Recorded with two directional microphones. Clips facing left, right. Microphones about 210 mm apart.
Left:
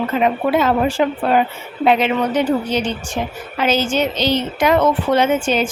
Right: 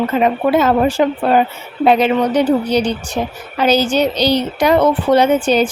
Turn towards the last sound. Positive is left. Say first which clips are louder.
# right 4 dB
turn(degrees=-35)  # may be behind; listen again after turning